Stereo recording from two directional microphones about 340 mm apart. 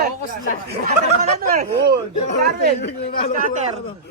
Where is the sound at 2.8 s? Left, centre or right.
Left.